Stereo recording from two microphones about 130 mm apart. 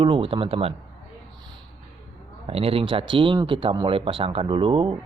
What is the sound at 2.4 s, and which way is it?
Speech, 50° right (ahead or behind).